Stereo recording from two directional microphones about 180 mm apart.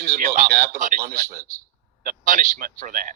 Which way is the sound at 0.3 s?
45° right (ahead or behind).